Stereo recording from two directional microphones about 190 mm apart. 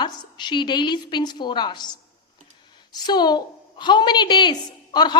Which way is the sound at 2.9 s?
20° left (ahead or behind).